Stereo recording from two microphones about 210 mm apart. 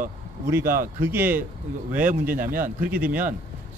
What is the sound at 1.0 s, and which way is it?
Speech, 10° right (ahead or behind).